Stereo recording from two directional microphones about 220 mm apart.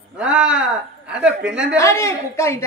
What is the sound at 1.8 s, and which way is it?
Speech, 15° left (ahead or behind).